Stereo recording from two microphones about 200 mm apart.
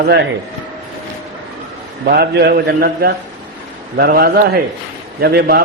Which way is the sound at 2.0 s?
50° right (ahead or behind).